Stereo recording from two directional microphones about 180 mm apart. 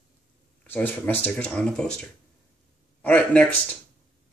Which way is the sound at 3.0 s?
5° left (ahead or behind).